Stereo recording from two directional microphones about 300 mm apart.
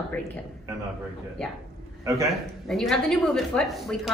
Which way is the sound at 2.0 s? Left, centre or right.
Centre.